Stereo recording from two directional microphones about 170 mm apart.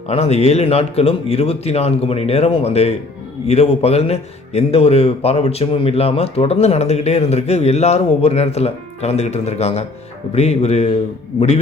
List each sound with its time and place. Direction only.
0.1 s a man's voice: 40° left (ahead or behind)